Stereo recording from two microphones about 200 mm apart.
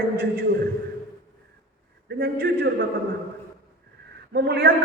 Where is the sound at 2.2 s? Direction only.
55° right (ahead or behind).